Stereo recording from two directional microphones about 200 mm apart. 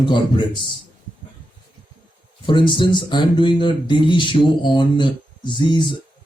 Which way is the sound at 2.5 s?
25° left (ahead or behind).